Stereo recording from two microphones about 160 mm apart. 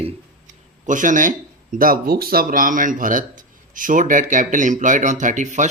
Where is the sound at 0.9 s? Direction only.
55° right (ahead or behind).